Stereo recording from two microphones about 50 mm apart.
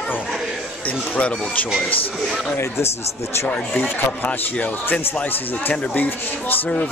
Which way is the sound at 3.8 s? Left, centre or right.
Left.